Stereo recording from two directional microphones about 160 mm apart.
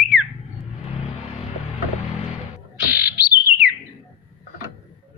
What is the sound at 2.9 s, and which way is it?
Bird, 10° right (ahead or behind).